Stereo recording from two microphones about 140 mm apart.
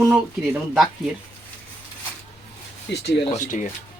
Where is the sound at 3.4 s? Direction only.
65° left (ahead or behind).